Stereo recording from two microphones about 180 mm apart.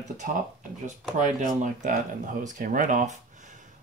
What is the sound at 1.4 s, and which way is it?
Speech, 45° right (ahead or behind).